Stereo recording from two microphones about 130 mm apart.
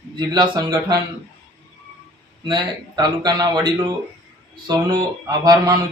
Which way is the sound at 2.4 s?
35° right (ahead or behind).